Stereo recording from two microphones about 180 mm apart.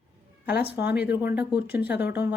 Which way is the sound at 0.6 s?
10° right (ahead or behind).